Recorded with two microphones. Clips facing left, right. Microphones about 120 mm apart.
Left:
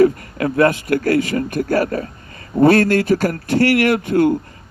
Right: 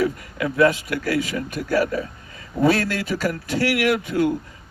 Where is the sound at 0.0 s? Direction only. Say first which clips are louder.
Left 8 dB; 55° left (ahead or behind).